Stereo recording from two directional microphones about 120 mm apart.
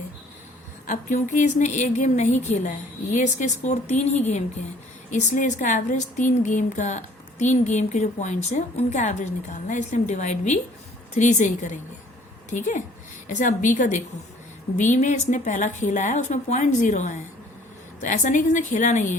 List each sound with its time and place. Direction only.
0.9 s speech: 90° left
5.1 s a woman's voice: 90° left